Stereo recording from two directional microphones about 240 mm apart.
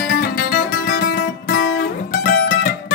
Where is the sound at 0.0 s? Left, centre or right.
Left.